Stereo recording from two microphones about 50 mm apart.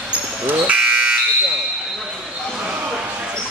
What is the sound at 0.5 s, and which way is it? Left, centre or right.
Fire alarm, right.